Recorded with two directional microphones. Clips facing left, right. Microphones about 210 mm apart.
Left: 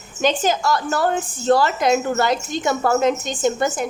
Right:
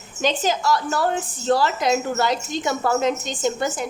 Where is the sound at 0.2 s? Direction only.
50° left (ahead or behind).